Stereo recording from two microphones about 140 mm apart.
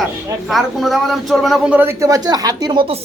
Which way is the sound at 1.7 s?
20° right (ahead or behind).